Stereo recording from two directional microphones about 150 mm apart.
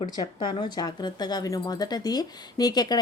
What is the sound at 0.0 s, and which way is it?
A woman's voice, 30° left (ahead or behind).